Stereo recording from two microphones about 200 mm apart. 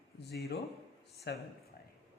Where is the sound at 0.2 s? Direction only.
55° left (ahead or behind).